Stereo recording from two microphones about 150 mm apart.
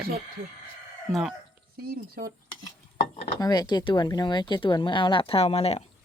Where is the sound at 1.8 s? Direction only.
80° right.